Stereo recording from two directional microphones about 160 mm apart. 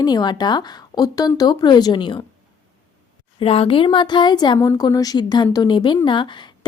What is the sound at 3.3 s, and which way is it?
Speech, 35° left (ahead or behind).